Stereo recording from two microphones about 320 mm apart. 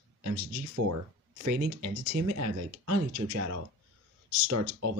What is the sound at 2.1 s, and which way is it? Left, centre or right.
Speech, right.